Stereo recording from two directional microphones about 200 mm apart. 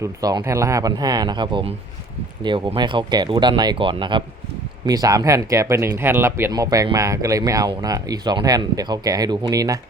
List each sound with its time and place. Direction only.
0.0 s speech: 20° right (ahead or behind)